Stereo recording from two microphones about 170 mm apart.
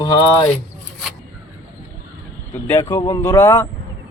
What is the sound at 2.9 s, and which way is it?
Speech, 20° left (ahead or behind).